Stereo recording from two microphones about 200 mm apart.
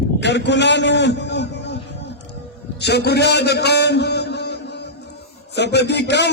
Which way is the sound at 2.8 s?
55° left (ahead or behind).